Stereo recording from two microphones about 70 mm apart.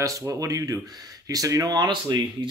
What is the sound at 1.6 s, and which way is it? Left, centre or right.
Speech, right.